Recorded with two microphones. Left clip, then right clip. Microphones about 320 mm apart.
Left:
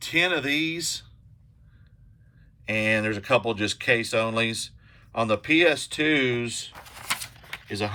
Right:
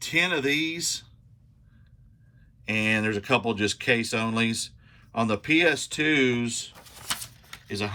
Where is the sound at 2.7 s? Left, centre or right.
Centre.